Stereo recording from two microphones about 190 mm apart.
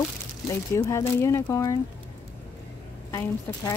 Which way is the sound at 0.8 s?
15° left (ahead or behind).